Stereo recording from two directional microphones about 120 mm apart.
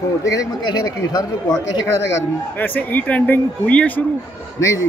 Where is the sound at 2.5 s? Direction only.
15° left (ahead or behind).